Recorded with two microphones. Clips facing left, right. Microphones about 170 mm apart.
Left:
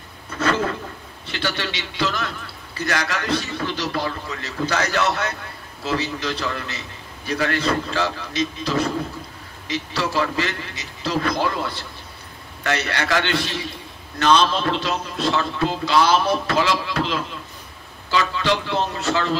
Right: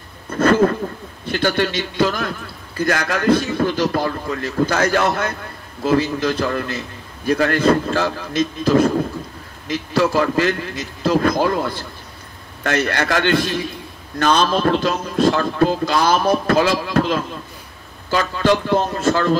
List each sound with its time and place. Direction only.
0.3 s a man's voice: 50° right (ahead or behind)